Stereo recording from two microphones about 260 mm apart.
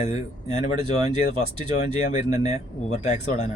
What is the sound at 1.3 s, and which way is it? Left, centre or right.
Speech, left.